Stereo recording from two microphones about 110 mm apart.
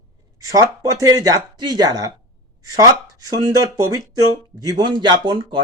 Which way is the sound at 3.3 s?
35° right (ahead or behind).